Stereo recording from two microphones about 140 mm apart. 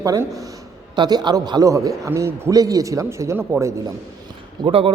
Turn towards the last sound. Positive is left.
turn(degrees=-40)  # may be behind; listen again after turning